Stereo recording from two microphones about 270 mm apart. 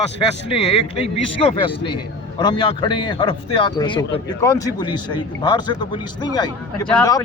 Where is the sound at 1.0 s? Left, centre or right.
Left.